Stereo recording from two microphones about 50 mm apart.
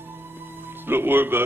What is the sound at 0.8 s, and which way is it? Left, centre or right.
Speech, right.